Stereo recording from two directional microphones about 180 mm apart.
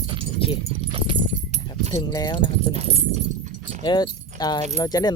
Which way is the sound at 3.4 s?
45° right (ahead or behind).